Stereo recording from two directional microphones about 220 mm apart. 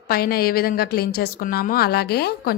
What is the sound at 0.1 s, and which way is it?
A woman's voice, 45° left (ahead or behind).